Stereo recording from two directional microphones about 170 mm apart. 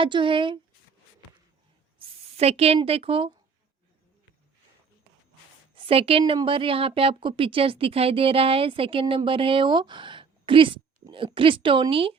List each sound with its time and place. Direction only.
0.0 s speech: 30° right (ahead or behind)
2.0 s speech: 35° right (ahead or behind)
5.7 s a woman's voice: 35° right (ahead or behind)